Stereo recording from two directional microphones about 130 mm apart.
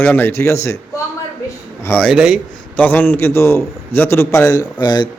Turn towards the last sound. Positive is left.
turn(degrees=35)  # may be behind; listen again after turning